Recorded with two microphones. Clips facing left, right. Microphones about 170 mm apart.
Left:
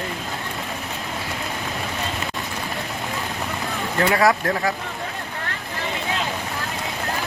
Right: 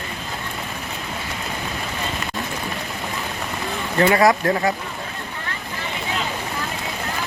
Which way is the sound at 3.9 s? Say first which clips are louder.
Right 3 dB; centre (ahead or behind).